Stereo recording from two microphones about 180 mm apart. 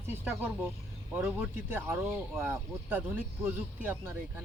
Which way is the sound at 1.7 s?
15° right (ahead or behind).